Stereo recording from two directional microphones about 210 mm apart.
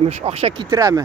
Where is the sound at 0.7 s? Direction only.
15° right (ahead or behind).